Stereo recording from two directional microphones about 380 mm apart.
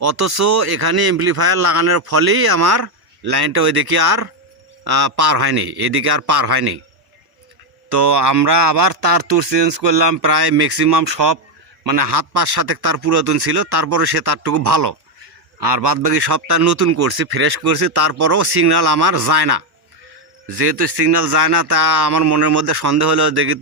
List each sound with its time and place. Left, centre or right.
0.0 s a man's voice: right
7.9 s speech: right